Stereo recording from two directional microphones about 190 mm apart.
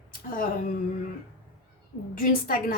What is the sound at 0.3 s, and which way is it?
Speech, 50° left (ahead or behind).